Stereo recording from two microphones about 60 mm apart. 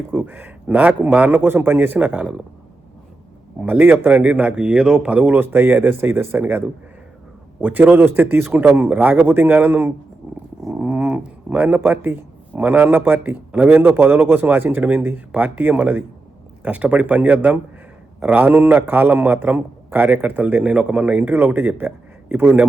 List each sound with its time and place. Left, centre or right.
0.1 s speech: right
3.6 s speech: right
4.2 s speech: right
5.2 s speech: right
10.8 s a sound: right
11.8 s speech: right